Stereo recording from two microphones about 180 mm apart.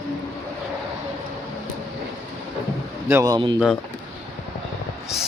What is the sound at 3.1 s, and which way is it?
Speech, 20° right (ahead or behind).